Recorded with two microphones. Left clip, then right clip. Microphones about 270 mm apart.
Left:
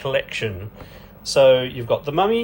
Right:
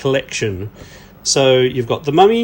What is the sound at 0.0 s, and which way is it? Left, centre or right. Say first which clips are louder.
Speech: right 5 dB; right.